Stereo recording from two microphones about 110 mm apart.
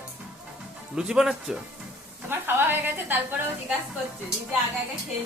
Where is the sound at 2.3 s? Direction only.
20° right (ahead or behind).